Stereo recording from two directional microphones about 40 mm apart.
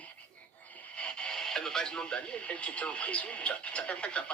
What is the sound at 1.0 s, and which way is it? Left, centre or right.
Radio, left.